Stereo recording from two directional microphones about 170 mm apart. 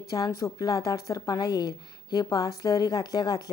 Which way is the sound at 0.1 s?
20° left (ahead or behind).